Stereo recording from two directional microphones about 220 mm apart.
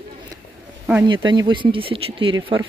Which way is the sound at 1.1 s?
20° right (ahead or behind).